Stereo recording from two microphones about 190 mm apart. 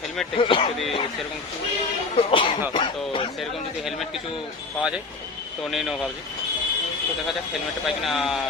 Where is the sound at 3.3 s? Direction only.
Centre (ahead or behind).